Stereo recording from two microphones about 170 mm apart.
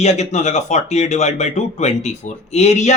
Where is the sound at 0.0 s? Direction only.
40° left (ahead or behind).